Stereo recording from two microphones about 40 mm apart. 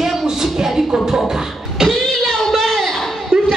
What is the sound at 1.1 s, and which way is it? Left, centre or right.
Beatboxing, centre.